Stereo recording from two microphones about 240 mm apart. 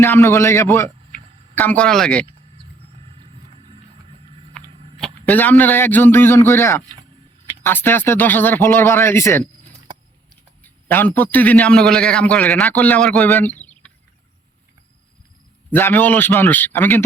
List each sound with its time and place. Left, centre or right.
0.0 s speech: centre
3.0 s a sound: right
4.9 s a man's voice: centre
15.7 s speech: centre